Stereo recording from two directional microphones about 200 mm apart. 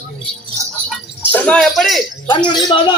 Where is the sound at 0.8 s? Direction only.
5° left (ahead or behind).